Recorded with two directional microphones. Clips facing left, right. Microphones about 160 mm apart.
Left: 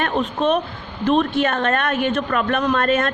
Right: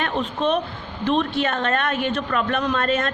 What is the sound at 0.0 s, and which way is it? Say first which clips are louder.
A woman's voice: left 3 dB; 50° left (ahead or behind).